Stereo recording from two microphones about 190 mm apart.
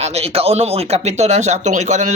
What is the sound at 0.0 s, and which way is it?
Speech, 35° right (ahead or behind).